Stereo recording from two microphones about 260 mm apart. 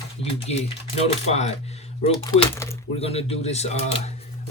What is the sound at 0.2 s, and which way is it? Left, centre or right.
A man's voice, left.